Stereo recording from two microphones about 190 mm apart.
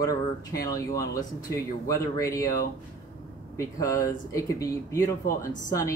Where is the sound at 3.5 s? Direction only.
15° left (ahead or behind).